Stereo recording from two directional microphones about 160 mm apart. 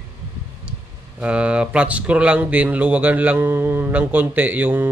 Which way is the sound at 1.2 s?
5° right (ahead or behind).